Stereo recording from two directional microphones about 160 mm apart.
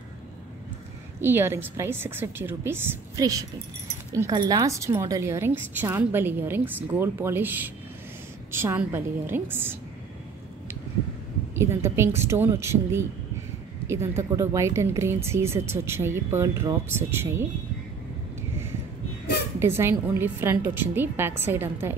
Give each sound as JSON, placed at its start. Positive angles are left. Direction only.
{"t": 1.2, "sound": "a woman's voice", "side_deg": -15}
{"t": 11.5, "sound": "a woman's voice", "side_deg": -15}
{"t": 19.6, "sound": "a woman's voice", "side_deg": -15}